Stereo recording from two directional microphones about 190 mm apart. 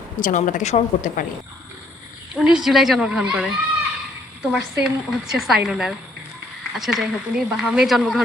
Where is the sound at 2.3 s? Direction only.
5° right (ahead or behind).